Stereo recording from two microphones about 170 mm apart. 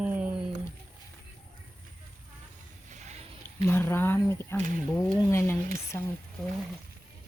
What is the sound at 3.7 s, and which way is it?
Speech, 15° left (ahead or behind).